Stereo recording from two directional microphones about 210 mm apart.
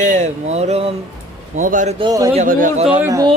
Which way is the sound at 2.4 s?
35° right (ahead or behind).